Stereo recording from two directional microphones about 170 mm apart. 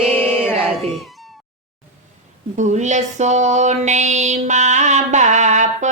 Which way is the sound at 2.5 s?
45° right (ahead or behind).